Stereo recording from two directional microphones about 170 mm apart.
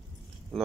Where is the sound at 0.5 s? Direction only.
Centre (ahead or behind).